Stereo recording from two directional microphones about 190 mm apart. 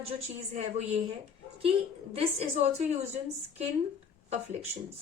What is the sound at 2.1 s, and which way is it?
A woman's voice, 35° right (ahead or behind).